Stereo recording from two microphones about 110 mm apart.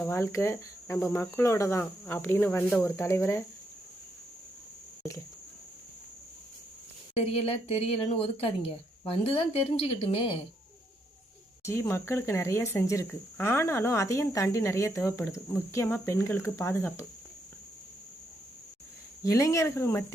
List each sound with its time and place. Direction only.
0.0 s speech: 25° left (ahead or behind)
5.0 s speech: 25° left (ahead or behind)
7.2 s speech: 65° left (ahead or behind)
11.6 s speech: 25° left (ahead or behind)
19.2 s speech: 30° left (ahead or behind)